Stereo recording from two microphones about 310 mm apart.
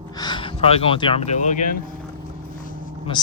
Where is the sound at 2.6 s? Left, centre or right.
Centre.